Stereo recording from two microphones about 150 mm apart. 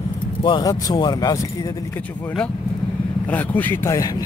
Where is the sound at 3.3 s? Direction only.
10° left (ahead or behind).